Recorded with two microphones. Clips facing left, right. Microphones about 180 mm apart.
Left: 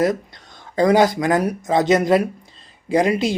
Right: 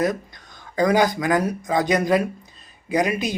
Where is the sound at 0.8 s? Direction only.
25° left (ahead or behind).